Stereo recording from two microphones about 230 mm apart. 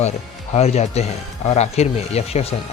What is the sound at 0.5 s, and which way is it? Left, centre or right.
Speech, left.